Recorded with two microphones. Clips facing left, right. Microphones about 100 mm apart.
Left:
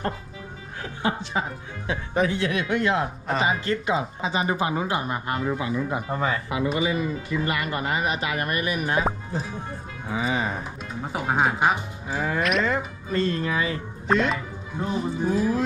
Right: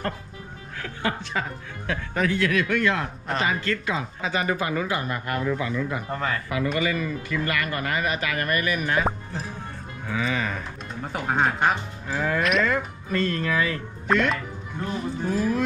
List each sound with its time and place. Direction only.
0.8 s speech: 25° left (ahead or behind)
10.1 s speech: 25° left (ahead or behind)
11.0 s speech: 5° left (ahead or behind)
12.1 s speech: 20° left (ahead or behind)
12.4 s speech: centre (ahead or behind)
12.6 s speech: 25° left (ahead or behind)